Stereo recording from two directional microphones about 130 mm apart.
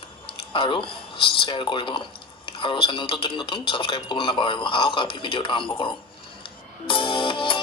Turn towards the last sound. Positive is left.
turn(degrees=40)  # may be behind; listen again after turning